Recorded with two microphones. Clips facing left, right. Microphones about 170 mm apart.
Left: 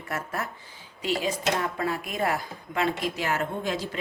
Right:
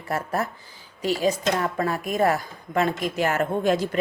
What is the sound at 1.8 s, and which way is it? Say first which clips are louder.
Speech: right 5 dB; 45° right (ahead or behind).